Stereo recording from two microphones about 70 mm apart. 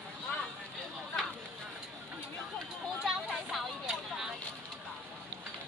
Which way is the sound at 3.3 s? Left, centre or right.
Centre.